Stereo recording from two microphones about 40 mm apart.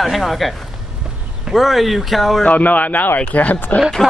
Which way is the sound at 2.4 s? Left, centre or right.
Left.